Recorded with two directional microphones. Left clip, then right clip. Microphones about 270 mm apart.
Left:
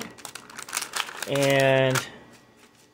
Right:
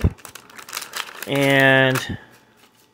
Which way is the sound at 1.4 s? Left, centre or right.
Right.